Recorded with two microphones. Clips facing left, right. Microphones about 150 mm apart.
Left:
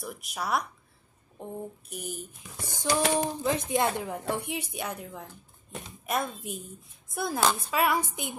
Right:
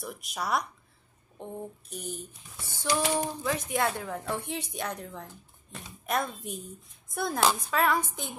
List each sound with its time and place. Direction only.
0.0 s speech: centre (ahead or behind)